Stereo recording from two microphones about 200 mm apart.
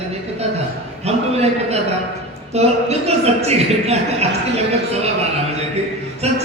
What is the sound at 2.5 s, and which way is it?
A man's voice, 30° right (ahead or behind).